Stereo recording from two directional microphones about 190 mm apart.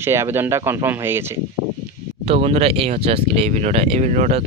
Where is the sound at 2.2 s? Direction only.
30° right (ahead or behind).